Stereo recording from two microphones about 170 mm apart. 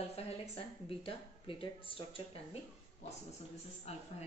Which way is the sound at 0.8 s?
30° left (ahead or behind).